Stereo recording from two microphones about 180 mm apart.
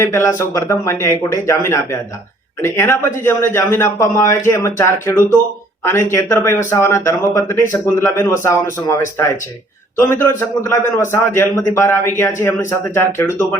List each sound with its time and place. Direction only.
0.0 s speech: 15° left (ahead or behind)